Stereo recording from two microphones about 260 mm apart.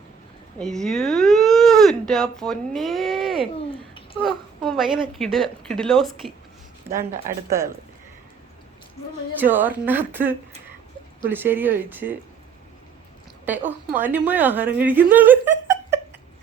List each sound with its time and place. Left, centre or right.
0.6 s speech: centre
3.9 s babbling: centre
4.6 s a sound: centre
5.1 s speech: centre
9.4 s a woman's voice: centre
13.4 s a woman's voice: centre